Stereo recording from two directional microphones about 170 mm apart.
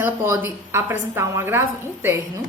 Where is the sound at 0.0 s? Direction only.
15° right (ahead or behind).